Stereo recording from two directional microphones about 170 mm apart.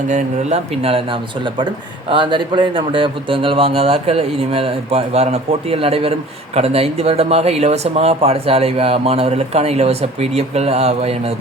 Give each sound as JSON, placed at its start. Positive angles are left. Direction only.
{"t": 0.1, "sound": "speech", "side_deg": -45}